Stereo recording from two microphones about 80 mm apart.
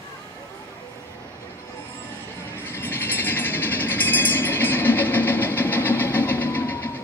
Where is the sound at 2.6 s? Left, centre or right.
Left.